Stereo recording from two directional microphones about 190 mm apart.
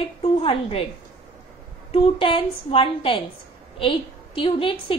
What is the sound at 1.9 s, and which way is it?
A woman's voice, 30° left (ahead or behind).